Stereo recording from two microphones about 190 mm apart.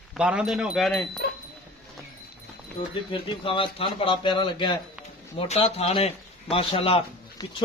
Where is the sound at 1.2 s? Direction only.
55° left (ahead or behind).